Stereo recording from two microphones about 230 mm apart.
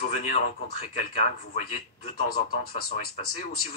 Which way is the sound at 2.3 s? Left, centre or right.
Left.